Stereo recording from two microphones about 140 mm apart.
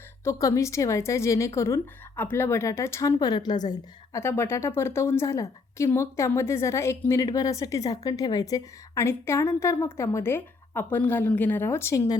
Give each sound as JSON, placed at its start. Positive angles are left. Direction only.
{"t": 0.3, "sound": "a woman's voice", "side_deg": 20}